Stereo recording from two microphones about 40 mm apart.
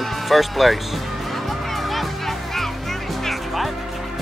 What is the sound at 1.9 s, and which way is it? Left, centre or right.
Music, centre.